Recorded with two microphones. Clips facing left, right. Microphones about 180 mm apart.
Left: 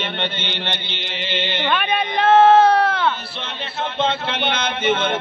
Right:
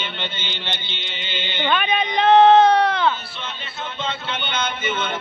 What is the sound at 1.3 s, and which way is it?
Mantra, 70° left (ahead or behind).